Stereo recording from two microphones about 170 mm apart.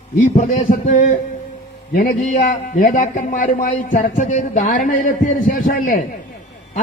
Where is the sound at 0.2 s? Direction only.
45° left (ahead or behind).